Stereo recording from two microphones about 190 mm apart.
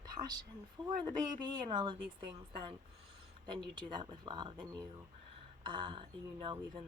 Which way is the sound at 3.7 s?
25° right (ahead or behind).